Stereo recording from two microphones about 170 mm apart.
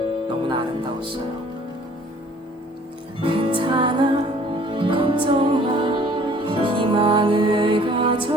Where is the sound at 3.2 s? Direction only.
30° right (ahead or behind).